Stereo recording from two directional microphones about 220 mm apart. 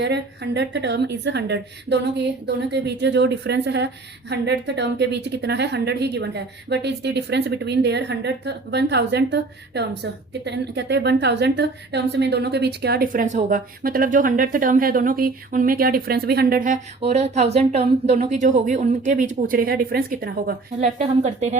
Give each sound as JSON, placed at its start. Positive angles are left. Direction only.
{"t": 0.0, "sound": "a woman's voice", "side_deg": -50}